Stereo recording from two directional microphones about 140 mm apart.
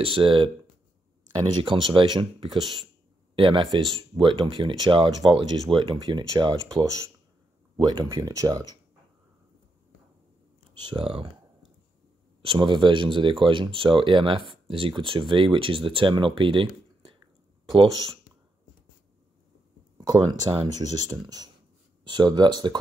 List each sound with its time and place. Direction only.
0.0 s speech: 40° right (ahead or behind)
1.6 s speech: 35° right (ahead or behind)
10.8 s speech: 35° right (ahead or behind)
12.4 s speech: 35° right (ahead or behind)
20.0 s speech: 30° right (ahead or behind)